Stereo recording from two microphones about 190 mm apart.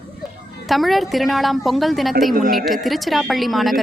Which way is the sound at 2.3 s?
50° right (ahead or behind).